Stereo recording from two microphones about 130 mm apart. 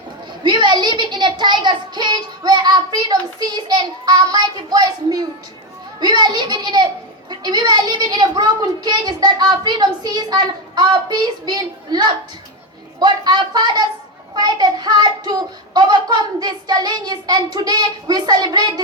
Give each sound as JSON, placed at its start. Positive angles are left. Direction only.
{"t": 0.4, "sound": "a child's voice", "side_deg": -35}